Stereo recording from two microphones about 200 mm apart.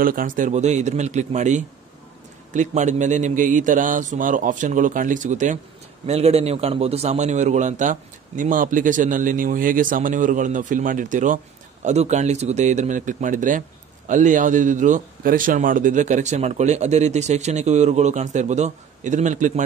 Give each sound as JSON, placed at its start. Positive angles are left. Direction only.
{"t": 0.0, "sound": "speech", "side_deg": -45}